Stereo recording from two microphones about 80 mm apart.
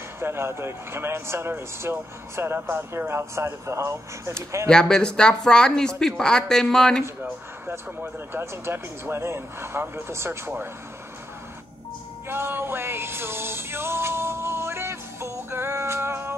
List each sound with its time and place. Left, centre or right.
0.2 s speech: right
4.6 s speech: centre
7.6 s speech: right
12.3 s music: right